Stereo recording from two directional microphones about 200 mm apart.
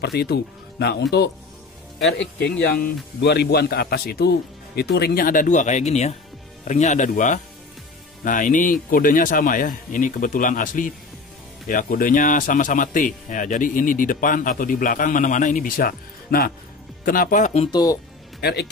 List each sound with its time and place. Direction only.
0.0 s speech: 55° left (ahead or behind)
2.1 s a man's voice: 55° left (ahead or behind)
17.6 s speech: 20° left (ahead or behind)
18.4 s speech: 55° left (ahead or behind)